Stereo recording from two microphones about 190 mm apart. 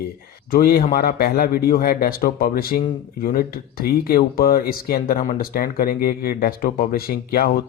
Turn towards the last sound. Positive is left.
turn(degrees=50)  # may be behind; listen again after turning